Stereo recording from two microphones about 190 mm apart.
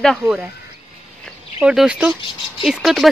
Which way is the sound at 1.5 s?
5° right (ahead or behind).